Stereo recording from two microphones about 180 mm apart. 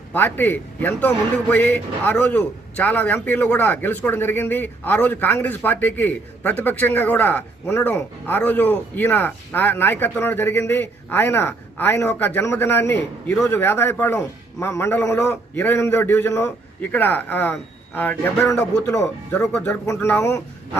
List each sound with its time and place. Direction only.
0.1 s a man's voice: 10° left (ahead or behind)